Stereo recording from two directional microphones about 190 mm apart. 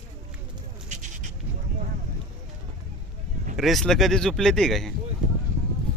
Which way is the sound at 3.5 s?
Centre (ahead or behind).